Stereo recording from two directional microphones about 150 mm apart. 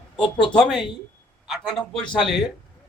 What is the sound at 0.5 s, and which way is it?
A man's voice, centre (ahead or behind).